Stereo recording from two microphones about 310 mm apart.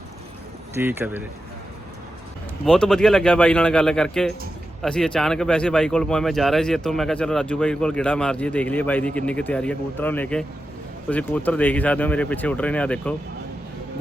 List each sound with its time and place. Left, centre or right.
0.8 s speech: centre
2.6 s speech: centre